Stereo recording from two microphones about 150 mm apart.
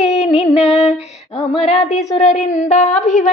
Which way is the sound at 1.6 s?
50° left (ahead or behind).